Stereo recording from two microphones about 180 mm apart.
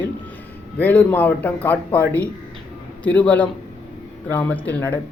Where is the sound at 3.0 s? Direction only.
10° left (ahead or behind).